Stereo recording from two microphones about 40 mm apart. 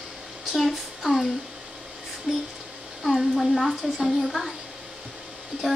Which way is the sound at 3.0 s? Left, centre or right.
Centre.